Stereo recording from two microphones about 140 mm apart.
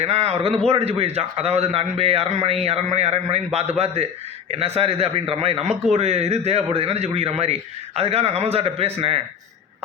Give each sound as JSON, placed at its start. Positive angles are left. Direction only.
{"t": 0.0, "sound": "a man's voice", "side_deg": -50}